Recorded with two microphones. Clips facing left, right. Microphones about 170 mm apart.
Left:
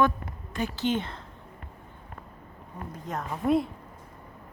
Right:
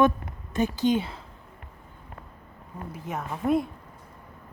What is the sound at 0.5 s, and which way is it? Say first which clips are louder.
Speech: right 4 dB; 15° right (ahead or behind).